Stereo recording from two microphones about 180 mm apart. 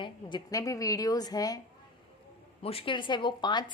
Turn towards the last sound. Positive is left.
turn(degrees=25)  # may be behind; listen again after turning